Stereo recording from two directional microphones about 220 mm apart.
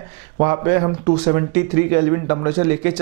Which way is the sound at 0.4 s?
15° right (ahead or behind).